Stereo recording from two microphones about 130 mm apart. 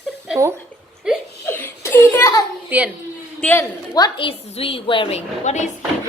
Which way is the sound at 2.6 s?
10° right (ahead or behind).